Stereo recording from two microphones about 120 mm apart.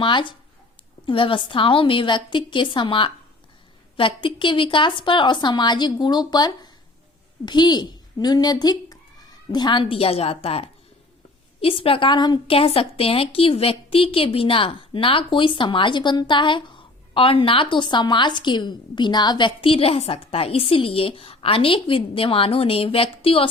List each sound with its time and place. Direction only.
0.0 s a woman's voice: 40° left (ahead or behind)
12.5 s a woman's voice: 50° left (ahead or behind)